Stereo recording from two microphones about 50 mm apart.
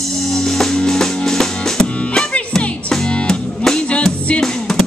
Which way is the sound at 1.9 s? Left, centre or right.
Left.